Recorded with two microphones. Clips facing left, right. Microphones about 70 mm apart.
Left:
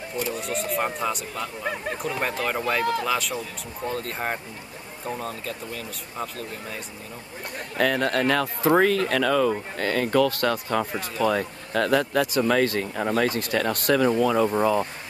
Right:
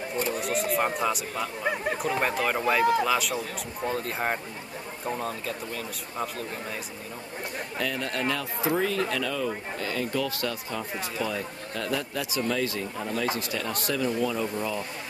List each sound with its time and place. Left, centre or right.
0.3 s speech: centre
7.7 s speech: left